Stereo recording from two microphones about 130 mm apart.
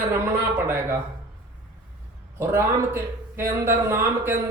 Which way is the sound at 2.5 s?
20° right (ahead or behind).